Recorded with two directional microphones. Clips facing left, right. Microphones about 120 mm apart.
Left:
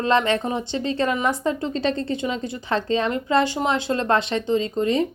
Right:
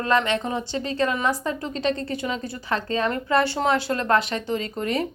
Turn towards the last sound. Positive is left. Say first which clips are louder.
# left 5 dB
turn(degrees=25)  # may be behind; listen again after turning